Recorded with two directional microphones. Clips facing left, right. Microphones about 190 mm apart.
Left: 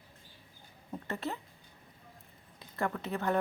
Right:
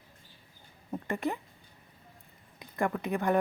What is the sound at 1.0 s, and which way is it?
Speech, 15° right (ahead or behind).